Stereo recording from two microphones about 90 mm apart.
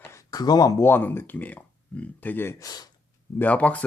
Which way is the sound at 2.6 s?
45° left (ahead or behind).